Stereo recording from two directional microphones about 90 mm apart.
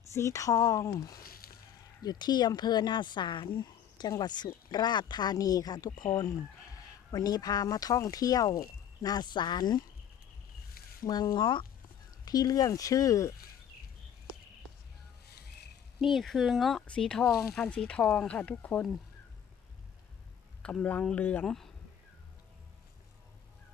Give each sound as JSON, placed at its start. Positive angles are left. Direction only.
{"t": 0.0, "sound": "speech", "side_deg": 35}
{"t": 2.0, "sound": "speech", "side_deg": 50}
{"t": 11.0, "sound": "speech", "side_deg": 45}
{"t": 12.2, "sound": "speech", "side_deg": 45}
{"t": 16.0, "sound": "speech", "side_deg": 0}
{"t": 20.6, "sound": "speech", "side_deg": 10}